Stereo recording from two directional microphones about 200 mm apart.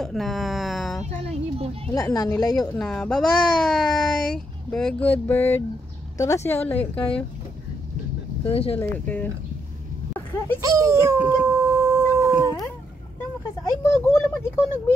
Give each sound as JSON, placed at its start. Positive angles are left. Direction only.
{"t": 0.0, "sound": "a sound", "side_deg": 0}
{"t": 1.3, "sound": "a sound", "side_deg": -30}
{"t": 1.9, "sound": "a woman's voice", "side_deg": 15}
{"t": 2.7, "sound": "a woman's voice", "side_deg": 5}
{"t": 8.5, "sound": "speech", "side_deg": 30}
{"t": 8.7, "sound": "a woman's voice", "side_deg": 10}
{"t": 10.6, "sound": "dog", "side_deg": -15}
{"t": 13.9, "sound": "a woman's voice", "side_deg": 10}